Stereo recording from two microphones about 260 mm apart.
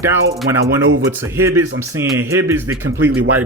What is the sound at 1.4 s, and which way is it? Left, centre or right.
A man's voice, centre.